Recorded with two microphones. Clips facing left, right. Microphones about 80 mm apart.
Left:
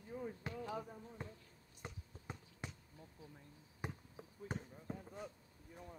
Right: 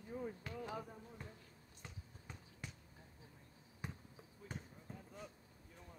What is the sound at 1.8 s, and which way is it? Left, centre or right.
Basketball bounce, left.